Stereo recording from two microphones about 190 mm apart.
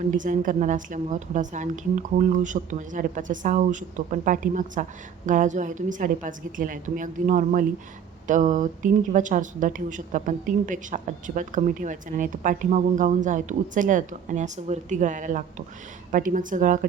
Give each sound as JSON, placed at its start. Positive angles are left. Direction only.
{"t": 0.1, "sound": "a woman's voice", "side_deg": -45}